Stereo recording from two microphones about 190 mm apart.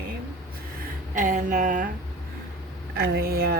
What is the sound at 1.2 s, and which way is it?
Speech, 45° right (ahead or behind).